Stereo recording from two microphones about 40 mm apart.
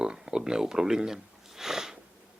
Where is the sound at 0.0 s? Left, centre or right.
Centre.